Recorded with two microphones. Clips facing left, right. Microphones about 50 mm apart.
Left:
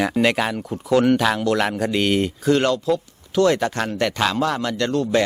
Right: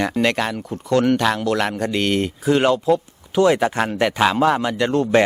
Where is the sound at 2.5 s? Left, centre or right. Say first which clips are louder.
Right 3 dB; centre.